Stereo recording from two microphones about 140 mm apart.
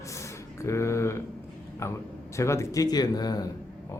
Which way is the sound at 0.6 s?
20° left (ahead or behind).